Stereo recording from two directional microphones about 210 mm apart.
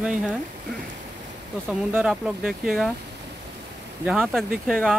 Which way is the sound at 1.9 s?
5° right (ahead or behind).